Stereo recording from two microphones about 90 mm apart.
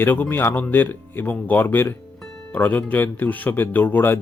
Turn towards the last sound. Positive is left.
turn(degrees=20)  # may be behind; listen again after turning